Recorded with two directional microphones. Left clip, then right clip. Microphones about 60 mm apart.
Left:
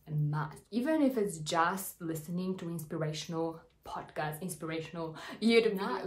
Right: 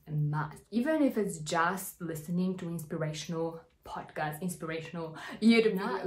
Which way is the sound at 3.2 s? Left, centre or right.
Centre.